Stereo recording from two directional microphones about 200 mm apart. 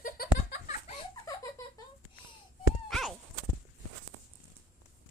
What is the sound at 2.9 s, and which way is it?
Horse, centre (ahead or behind).